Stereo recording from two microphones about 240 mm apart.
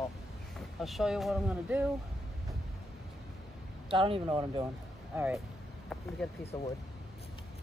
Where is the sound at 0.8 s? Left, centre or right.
Centre.